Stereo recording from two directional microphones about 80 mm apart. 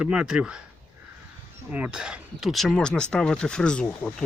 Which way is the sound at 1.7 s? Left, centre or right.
Centre.